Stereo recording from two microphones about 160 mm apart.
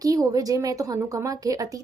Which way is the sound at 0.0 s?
20° right (ahead or behind).